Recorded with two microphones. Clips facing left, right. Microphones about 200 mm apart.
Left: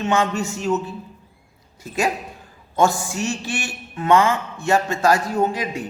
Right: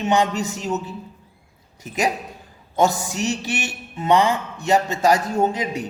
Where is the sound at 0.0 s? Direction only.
15° right (ahead or behind).